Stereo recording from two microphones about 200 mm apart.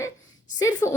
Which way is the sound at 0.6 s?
15° left (ahead or behind).